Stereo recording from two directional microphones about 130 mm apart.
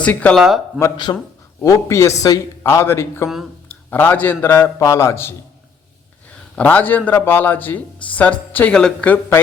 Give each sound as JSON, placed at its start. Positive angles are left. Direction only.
{"t": 0.0, "sound": "a man's voice", "side_deg": 10}
{"t": 0.3, "sound": "speech", "side_deg": 0}
{"t": 1.1, "sound": "speech", "side_deg": 30}
{"t": 3.2, "sound": "a sound", "side_deg": 0}
{"t": 3.8, "sound": "a man's voice", "side_deg": 15}
{"t": 6.6, "sound": "a man's voice", "side_deg": 10}